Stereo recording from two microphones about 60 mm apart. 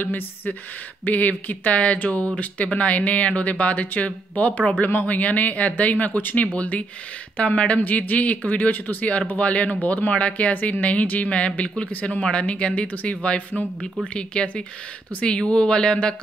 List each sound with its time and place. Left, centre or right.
0.0 s speech: left; by 16.2 s centre